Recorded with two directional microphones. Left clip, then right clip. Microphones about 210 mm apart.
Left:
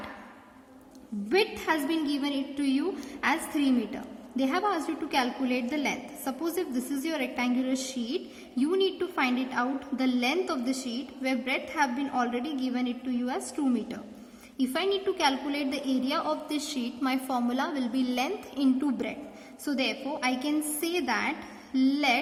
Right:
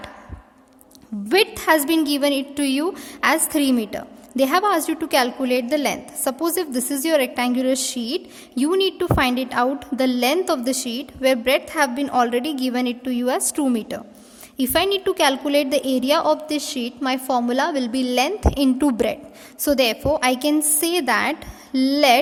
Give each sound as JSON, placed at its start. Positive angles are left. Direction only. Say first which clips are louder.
{"t": 1.3, "sound": "a woman's voice", "louder": "right 9 dB", "side_deg": -50}